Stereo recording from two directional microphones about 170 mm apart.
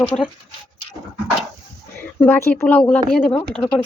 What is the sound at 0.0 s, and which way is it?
Speech, 5° left (ahead or behind).